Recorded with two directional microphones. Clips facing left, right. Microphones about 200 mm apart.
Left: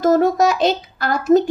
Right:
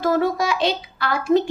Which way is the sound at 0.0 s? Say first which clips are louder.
Left 6 dB; 45° left (ahead or behind).